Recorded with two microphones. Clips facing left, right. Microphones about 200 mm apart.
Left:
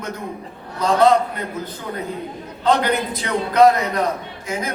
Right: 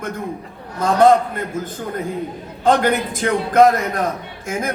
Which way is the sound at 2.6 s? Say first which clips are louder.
Right 2 dB; 50° right (ahead or behind).